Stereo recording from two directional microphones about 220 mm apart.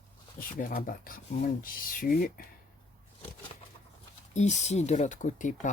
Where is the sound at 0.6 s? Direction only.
40° left (ahead or behind).